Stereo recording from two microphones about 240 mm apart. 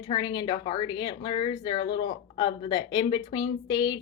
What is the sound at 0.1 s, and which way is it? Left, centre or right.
A woman's voice, centre.